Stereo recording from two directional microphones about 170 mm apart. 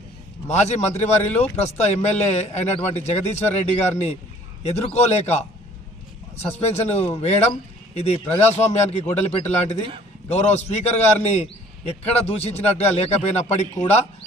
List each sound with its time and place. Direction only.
0.4 s a man's voice: 40° left (ahead or behind)